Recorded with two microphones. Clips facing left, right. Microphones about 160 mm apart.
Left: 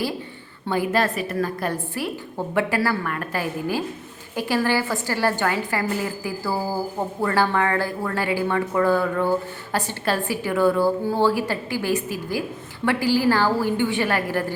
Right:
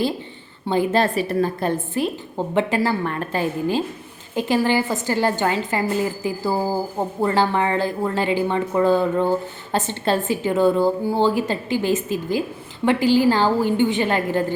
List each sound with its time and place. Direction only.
0.7 s a woman's voice: 25° right (ahead or behind)